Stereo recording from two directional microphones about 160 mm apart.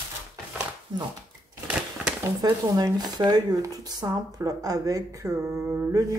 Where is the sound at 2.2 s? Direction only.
20° right (ahead or behind).